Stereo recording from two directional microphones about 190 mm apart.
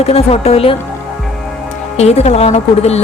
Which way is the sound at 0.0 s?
30° left (ahead or behind).